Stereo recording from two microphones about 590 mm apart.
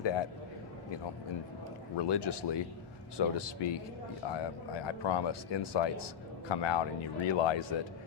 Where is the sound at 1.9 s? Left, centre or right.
Left.